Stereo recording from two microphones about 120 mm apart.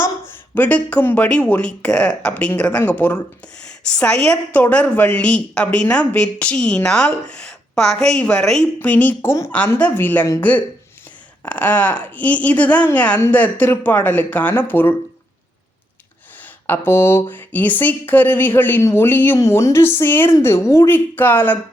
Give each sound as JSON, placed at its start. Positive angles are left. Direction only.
{"t": 0.0, "sound": "a woman's voice", "side_deg": 15}
{"t": 11.4, "sound": "a woman's voice", "side_deg": 15}
{"t": 16.4, "sound": "a woman's voice", "side_deg": 20}